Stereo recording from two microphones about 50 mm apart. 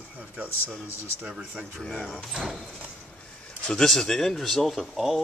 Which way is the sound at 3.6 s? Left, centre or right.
Centre.